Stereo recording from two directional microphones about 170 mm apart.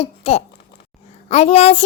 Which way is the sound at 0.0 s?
35° left (ahead or behind).